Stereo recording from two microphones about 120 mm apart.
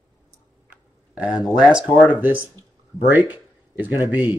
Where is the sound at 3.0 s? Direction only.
15° right (ahead or behind).